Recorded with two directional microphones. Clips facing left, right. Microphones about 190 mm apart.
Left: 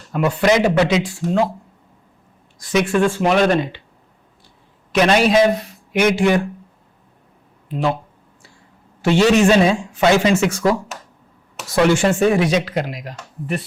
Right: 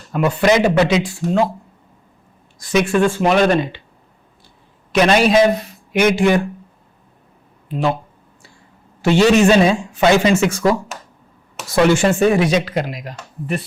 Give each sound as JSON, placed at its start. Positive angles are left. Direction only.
{"t": 0.1, "sound": "speech", "side_deg": -20}
{"t": 2.7, "sound": "speech", "side_deg": -15}
{"t": 4.9, "sound": "a man's voice", "side_deg": -10}
{"t": 9.0, "sound": "speech", "side_deg": -10}
{"t": 11.9, "sound": "speech", "side_deg": -10}